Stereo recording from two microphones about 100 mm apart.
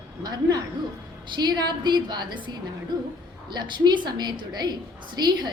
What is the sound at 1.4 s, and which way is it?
A woman's voice, 45° right (ahead or behind).